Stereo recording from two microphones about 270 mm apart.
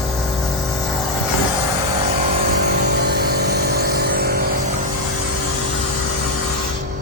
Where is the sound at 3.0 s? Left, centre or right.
Right.